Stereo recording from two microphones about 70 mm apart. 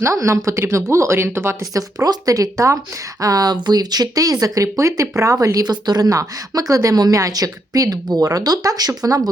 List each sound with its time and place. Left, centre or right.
0.0 s speech: right
2.0 s speech: right
5.6 s speech: right
6.1 s speech: right